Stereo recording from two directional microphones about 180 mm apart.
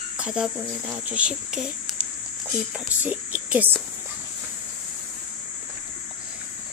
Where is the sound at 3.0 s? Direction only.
10° right (ahead or behind).